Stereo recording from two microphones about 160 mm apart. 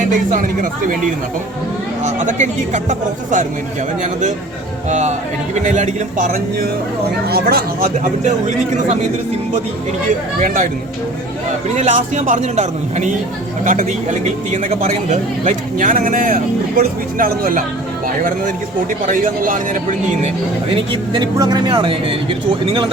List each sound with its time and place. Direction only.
0.0 s a man's voice: 55° right (ahead or behind)
7.3 s speech: 75° right (ahead or behind)
7.9 s a man's voice: 50° right (ahead or behind)
10.4 s a man's voice: 55° right (ahead or behind)
11.8 s a man's voice: 50° right (ahead or behind)
20.9 s speech: 35° right (ahead or behind)
21.3 s speech: 20° right (ahead or behind)